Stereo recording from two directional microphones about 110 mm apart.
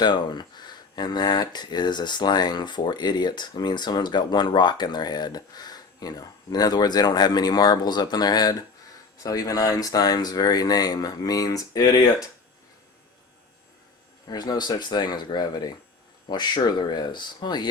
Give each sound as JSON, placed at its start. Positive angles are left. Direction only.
{"t": 0.0, "sound": "speech", "side_deg": 45}
{"t": 14.3, "sound": "speech", "side_deg": 40}